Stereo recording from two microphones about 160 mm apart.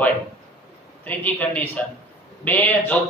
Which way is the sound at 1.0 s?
10° left (ahead or behind).